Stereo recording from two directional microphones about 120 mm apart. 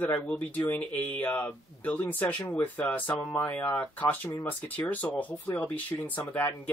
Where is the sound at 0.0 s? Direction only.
10° left (ahead or behind).